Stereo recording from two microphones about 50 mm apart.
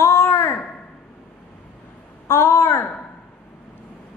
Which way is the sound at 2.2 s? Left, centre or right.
Left.